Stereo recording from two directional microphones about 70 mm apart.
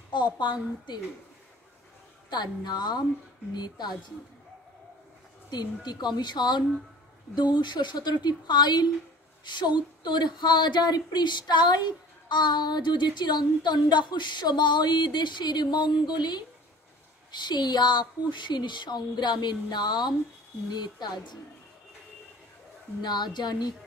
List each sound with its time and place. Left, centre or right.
0.1 s speech: left
2.2 s speech: left
5.9 s speech: left
23.0 s speech: left